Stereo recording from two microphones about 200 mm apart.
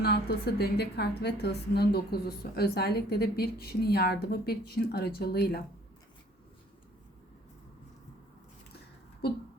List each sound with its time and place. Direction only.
0.0 s a woman's voice: 55° left (ahead or behind)